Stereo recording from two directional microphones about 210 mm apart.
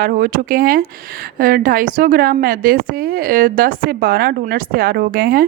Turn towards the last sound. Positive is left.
turn(degrees=-45)  # may be behind; listen again after turning